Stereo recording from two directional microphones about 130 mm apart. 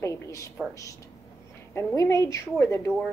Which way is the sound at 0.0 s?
25° left (ahead or behind).